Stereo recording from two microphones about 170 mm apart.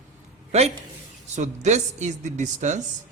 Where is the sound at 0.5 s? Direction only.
40° right (ahead or behind).